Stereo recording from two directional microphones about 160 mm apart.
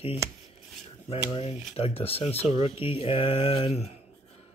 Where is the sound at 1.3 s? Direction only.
40° left (ahead or behind).